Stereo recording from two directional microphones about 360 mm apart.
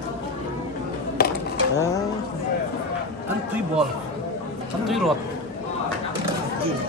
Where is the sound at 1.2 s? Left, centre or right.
Left.